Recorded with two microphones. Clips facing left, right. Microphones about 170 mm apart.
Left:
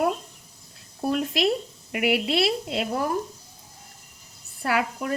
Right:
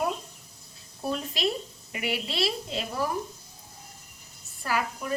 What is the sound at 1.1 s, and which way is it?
Speech, 70° left (ahead or behind).